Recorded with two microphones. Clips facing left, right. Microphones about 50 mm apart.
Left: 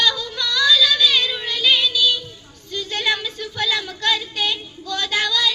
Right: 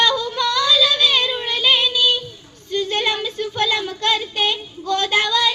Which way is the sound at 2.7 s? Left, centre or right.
Right.